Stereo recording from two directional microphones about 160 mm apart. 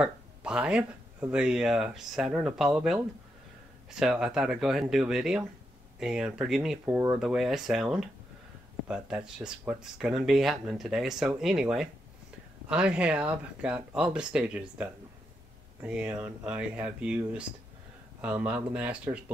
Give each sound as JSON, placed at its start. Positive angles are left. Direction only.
{"t": 0.0, "sound": "speech", "side_deg": -5}